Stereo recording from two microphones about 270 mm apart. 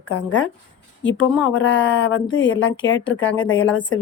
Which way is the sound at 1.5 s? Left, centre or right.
Left.